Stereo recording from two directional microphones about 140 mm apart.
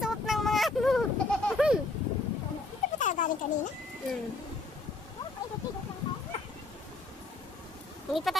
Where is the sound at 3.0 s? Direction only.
65° left (ahead or behind).